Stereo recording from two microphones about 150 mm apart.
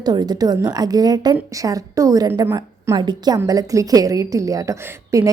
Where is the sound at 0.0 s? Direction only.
25° right (ahead or behind).